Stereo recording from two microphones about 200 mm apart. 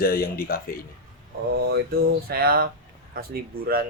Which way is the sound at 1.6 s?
50° right (ahead or behind).